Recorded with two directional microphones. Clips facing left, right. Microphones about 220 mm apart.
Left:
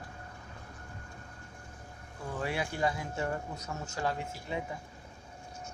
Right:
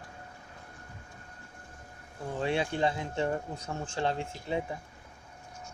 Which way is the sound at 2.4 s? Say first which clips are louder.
Right 4 dB; 25° right (ahead or behind).